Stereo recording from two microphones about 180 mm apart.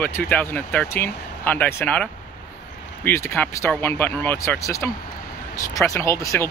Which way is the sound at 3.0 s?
15° left (ahead or behind).